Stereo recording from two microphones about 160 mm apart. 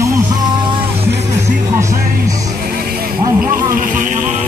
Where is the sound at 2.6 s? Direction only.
70° right (ahead or behind).